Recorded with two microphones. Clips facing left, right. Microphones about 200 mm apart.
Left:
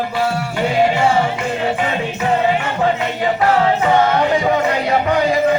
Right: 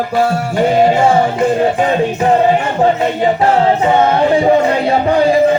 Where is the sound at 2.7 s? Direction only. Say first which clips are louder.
Right 5 dB; 30° right (ahead or behind).